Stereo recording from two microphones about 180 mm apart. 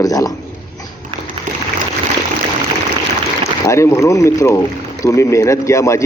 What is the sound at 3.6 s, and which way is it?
Speech, 15° left (ahead or behind).